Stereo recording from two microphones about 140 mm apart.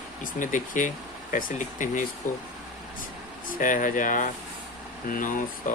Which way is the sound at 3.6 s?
70° left (ahead or behind).